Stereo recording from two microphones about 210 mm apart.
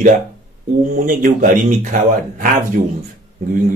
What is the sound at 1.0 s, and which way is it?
Speech, 40° right (ahead or behind).